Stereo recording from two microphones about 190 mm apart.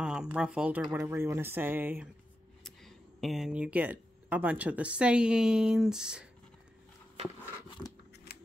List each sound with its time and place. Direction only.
0.0 s speech: 5° right (ahead or behind)
2.6 s speech: centre (ahead or behind)